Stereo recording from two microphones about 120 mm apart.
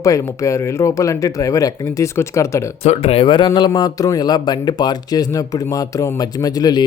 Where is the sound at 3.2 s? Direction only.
40° left (ahead or behind).